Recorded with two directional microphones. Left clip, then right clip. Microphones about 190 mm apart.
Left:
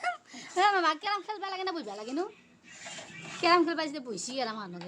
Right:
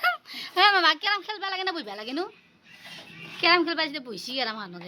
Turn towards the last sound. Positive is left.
turn(degrees=5)  # may be behind; listen again after turning